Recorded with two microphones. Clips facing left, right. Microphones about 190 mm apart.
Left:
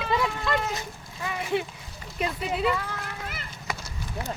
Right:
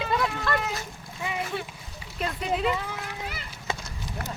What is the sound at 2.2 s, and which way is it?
Speech, centre (ahead or behind).